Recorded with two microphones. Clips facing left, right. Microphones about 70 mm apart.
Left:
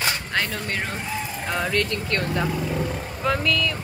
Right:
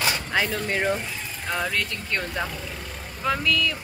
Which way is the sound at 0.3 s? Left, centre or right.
Centre.